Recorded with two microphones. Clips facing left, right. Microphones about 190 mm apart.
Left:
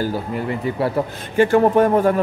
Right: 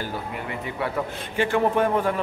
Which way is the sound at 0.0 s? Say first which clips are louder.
Left 8 dB; 35° left (ahead or behind).